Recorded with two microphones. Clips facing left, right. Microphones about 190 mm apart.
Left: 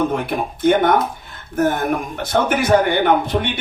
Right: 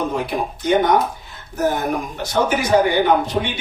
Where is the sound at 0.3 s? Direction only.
55° left (ahead or behind).